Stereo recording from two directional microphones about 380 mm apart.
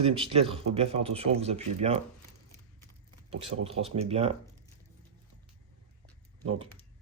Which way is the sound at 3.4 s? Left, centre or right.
Centre.